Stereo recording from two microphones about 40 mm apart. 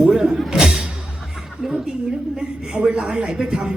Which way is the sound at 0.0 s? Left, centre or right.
Centre.